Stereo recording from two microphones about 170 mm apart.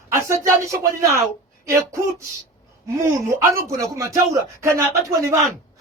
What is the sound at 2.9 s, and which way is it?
Speech, 15° right (ahead or behind).